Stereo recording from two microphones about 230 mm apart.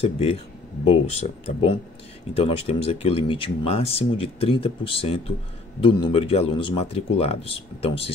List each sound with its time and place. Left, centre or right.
0.0 s speech: left